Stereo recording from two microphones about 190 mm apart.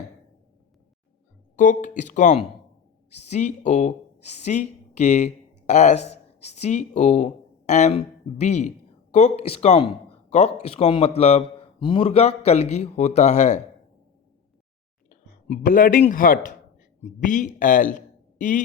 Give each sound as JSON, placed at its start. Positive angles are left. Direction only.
{"t": 1.5, "sound": "a man's voice", "side_deg": 45}
{"t": 15.1, "sound": "a man's voice", "side_deg": 45}